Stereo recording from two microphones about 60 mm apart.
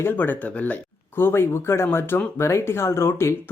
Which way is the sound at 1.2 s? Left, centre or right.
Left.